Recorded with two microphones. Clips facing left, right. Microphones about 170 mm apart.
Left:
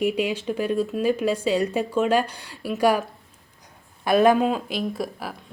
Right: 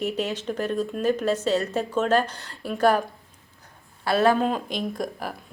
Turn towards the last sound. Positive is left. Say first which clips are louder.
# left 1 dB
turn(degrees=5)  # may be behind; listen again after turning